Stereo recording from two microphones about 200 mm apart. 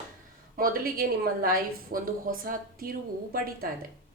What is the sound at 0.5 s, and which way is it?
A woman's voice, 45° right (ahead or behind).